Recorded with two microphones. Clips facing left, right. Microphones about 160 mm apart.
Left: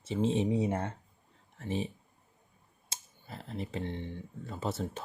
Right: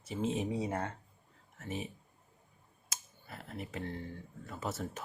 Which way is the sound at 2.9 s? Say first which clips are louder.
Left 2 dB; 25° left (ahead or behind).